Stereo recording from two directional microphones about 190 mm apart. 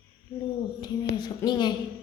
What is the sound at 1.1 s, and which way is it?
Speech, 25° left (ahead or behind).